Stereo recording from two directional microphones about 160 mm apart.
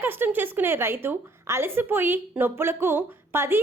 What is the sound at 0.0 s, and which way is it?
Speech, 15° right (ahead or behind).